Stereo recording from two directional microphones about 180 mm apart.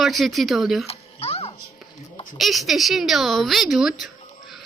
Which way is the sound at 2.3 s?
Centre (ahead or behind).